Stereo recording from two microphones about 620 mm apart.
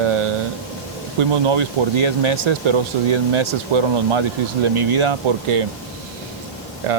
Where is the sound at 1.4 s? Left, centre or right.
Right.